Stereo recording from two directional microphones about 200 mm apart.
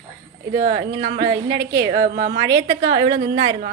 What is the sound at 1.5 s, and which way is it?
Speech, 55° right (ahead or behind).